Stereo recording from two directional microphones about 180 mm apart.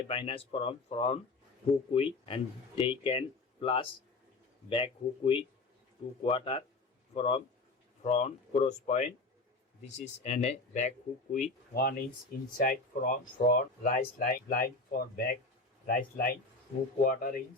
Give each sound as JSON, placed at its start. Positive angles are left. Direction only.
{"t": 0.1, "sound": "speech", "side_deg": 30}
{"t": 11.7, "sound": "speech", "side_deg": 55}